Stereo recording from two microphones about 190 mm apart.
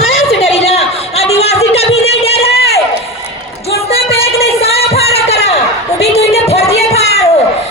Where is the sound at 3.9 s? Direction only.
30° left (ahead or behind).